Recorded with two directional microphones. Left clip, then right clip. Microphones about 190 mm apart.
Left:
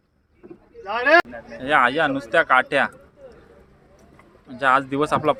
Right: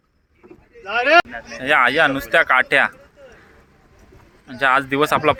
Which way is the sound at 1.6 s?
5° right (ahead or behind).